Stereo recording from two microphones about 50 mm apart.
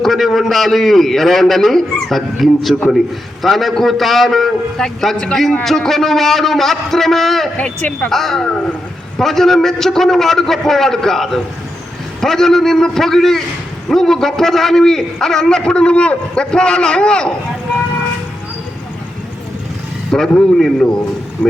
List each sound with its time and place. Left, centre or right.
0.0 s a man's voice: centre
7.5 s speech: left
8.1 s a man's voice: centre
8.4 s speech: left
9.1 s a man's voice: centre
20.1 s a man's voice: centre